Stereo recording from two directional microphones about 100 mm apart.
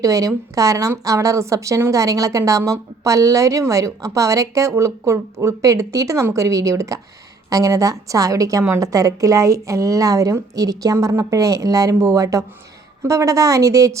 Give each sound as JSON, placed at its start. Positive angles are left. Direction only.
{"t": 0.0, "sound": "a woman's voice", "side_deg": -35}